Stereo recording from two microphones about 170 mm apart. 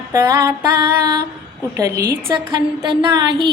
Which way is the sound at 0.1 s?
20° right (ahead or behind).